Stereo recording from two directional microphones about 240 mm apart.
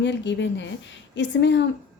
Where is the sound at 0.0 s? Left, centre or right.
Left.